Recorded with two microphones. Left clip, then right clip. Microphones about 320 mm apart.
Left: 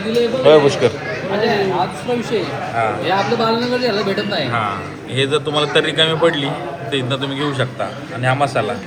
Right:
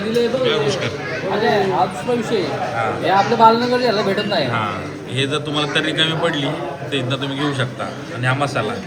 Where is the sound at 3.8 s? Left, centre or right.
Right.